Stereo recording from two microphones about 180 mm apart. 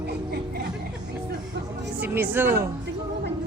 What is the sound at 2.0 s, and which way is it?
Speech, 10° right (ahead or behind).